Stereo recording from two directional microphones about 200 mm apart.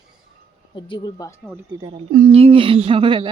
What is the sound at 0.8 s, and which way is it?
Speech, 20° left (ahead or behind).